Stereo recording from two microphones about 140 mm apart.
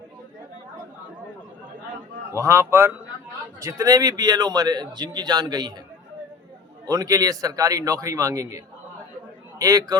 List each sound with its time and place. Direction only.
2.3 s a man's voice: 20° right (ahead or behind)
6.8 s a man's voice: 25° right (ahead or behind)